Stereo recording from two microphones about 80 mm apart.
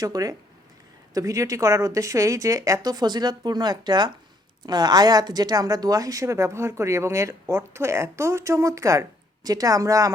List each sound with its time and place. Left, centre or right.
0.0 s a woman's voice: right